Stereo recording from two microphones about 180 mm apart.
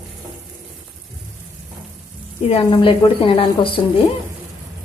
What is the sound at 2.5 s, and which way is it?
A woman's voice, 25° left (ahead or behind).